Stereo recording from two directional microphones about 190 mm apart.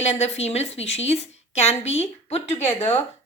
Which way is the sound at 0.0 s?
35° left (ahead or behind).